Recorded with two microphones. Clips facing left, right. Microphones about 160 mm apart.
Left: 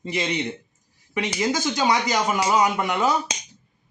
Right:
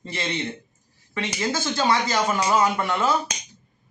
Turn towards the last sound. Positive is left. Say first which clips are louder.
# left 1 dB
turn(degrees=15)  # may be behind; listen again after turning